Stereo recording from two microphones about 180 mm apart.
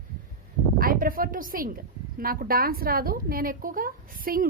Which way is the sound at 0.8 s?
50° right (ahead or behind).